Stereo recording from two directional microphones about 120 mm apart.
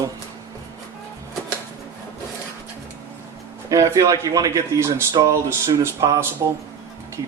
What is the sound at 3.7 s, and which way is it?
Speech, 25° right (ahead or behind).